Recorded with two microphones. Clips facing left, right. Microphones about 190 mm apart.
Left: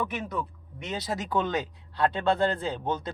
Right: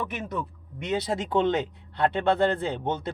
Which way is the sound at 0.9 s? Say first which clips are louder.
Right 5 dB; 25° right (ahead or behind).